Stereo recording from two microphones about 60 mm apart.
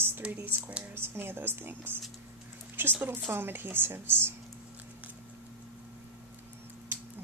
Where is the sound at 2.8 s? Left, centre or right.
Right.